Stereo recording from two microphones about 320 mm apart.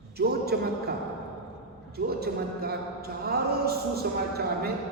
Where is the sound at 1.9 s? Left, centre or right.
Right.